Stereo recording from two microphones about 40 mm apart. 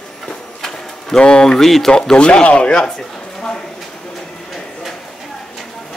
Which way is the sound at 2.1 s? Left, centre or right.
Left.